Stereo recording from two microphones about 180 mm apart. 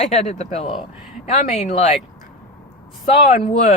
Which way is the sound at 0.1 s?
35° left (ahead or behind).